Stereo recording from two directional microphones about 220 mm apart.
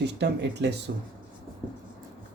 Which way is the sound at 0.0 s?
50° right (ahead or behind).